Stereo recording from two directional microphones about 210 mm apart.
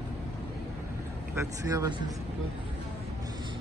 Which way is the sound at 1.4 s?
15° right (ahead or behind).